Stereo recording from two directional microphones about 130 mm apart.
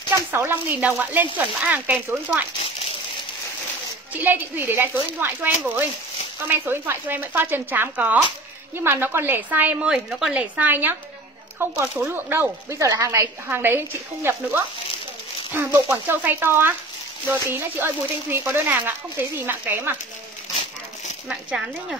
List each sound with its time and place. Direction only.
0.3 s a woman's voice: 15° right (ahead or behind)
4.2 s a woman's voice: 15° right (ahead or behind)
21.3 s speech: 5° right (ahead or behind)